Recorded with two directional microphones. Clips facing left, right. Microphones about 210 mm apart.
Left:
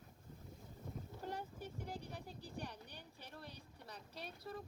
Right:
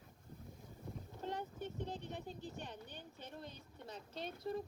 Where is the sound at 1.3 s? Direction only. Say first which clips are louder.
Right 4 dB; 20° right (ahead or behind).